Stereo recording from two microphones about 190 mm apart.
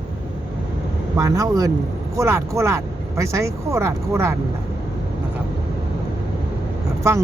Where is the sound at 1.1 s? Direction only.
15° right (ahead or behind).